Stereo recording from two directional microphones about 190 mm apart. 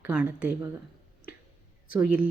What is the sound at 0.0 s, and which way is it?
Speech, 10° right (ahead or behind).